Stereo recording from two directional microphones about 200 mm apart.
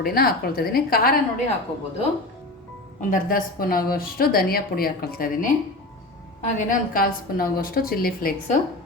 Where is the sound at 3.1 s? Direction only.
45° left (ahead or behind).